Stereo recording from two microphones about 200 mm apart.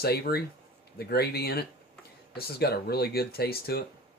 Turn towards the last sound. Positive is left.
turn(degrees=50)  # may be behind; listen again after turning